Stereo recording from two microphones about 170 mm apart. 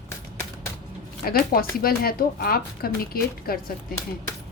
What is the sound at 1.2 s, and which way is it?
Speech, 60° left (ahead or behind).